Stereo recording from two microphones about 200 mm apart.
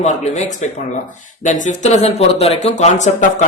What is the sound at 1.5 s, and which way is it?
Speech, 35° left (ahead or behind).